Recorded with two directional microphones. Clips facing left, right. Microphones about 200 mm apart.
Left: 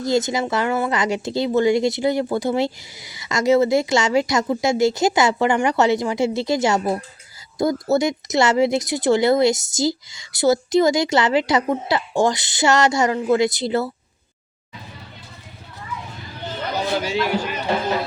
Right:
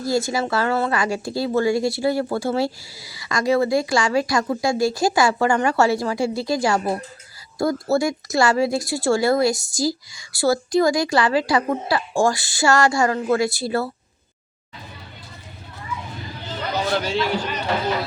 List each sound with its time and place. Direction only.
0.0 s a woman's voice: 20° left (ahead or behind)
17.0 s a man's voice: 10° left (ahead or behind)